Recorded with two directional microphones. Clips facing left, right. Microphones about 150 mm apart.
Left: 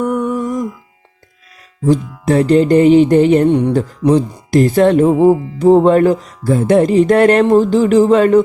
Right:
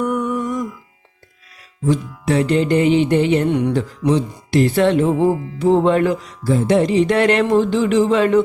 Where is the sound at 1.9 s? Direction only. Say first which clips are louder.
Left 5 dB; 40° left (ahead or behind).